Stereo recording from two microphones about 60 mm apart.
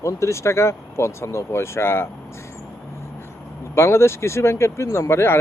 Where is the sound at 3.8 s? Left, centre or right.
Left.